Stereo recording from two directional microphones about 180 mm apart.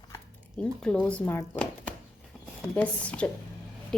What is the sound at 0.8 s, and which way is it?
Speech, 5° left (ahead or behind).